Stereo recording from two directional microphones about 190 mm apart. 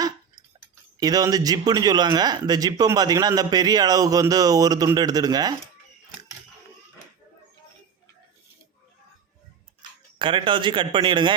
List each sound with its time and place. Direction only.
0.6 s speech: 20° right (ahead or behind)
10.2 s speech: 25° right (ahead or behind)